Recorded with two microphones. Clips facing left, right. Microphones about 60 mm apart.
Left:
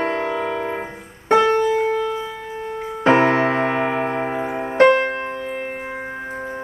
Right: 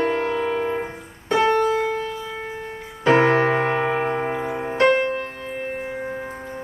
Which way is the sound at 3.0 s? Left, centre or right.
Left.